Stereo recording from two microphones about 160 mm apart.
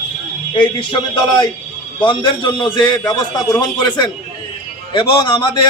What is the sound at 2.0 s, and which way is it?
A man's voice, 30° left (ahead or behind).